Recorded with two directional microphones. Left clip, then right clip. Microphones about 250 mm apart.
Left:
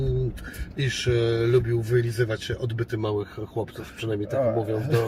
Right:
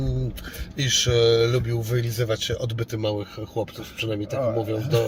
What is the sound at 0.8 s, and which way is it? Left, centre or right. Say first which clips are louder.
Speech: right 5 dB; centre.